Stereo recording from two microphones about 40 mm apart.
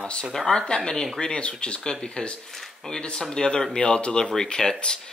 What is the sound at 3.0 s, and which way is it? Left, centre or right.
Speech, centre.